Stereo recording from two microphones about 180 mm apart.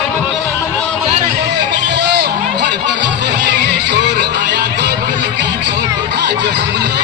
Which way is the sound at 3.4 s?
75° right (ahead or behind).